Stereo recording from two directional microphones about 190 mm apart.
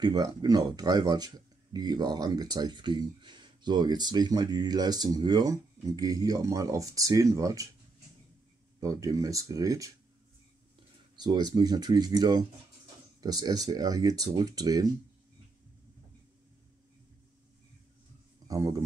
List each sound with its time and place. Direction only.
0.0 s speech: 20° right (ahead or behind)
8.7 s speech: 20° right (ahead or behind)
11.1 s speech: 20° right (ahead or behind)
18.5 s speech: 15° right (ahead or behind)